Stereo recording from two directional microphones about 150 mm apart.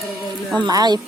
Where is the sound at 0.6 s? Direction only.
25° right (ahead or behind).